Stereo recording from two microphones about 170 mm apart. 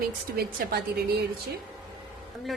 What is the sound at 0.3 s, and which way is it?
Speech, 70° right (ahead or behind).